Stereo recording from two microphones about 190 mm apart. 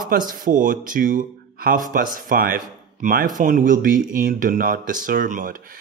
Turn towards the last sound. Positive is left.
turn(degrees=-45)  # may be behind; listen again after turning